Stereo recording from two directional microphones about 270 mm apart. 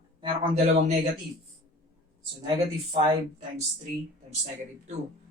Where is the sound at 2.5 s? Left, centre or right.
Centre.